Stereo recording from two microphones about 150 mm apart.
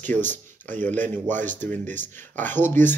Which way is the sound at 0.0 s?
10° left (ahead or behind).